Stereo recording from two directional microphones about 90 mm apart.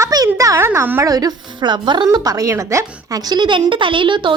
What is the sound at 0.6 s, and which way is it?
Speech, 25° right (ahead or behind).